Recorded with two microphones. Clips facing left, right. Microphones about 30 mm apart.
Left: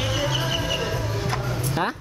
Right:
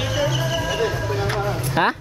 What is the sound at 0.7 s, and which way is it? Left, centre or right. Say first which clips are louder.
Music: right 5 dB; centre.